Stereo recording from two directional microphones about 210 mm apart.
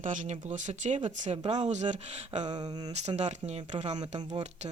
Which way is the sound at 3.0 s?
35° right (ahead or behind).